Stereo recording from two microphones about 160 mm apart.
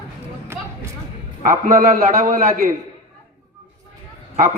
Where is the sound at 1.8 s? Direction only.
65° right (ahead or behind).